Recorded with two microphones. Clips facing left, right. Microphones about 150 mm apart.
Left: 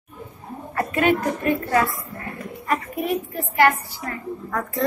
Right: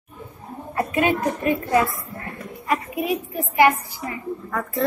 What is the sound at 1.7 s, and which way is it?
Speech, 20° right (ahead or behind).